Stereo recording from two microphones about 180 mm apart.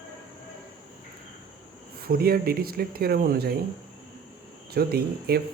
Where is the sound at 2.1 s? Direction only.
60° right (ahead or behind).